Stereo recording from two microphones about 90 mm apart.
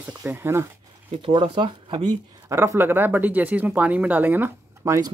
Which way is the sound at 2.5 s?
30° right (ahead or behind).